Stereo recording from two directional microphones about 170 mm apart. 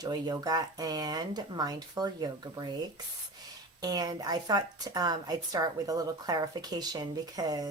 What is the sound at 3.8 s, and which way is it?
A woman's voice, 25° right (ahead or behind).